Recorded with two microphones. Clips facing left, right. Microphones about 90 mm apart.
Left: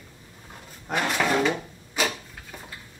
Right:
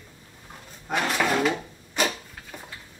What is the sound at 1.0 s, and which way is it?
Drawer open or close, centre (ahead or behind).